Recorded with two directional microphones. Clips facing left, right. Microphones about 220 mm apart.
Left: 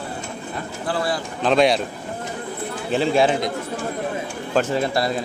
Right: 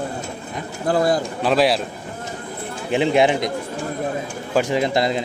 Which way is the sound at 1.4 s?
5° right (ahead or behind).